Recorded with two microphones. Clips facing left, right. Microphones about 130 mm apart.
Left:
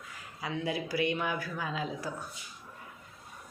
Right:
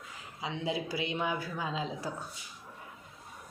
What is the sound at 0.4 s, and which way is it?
Speech, 20° right (ahead or behind).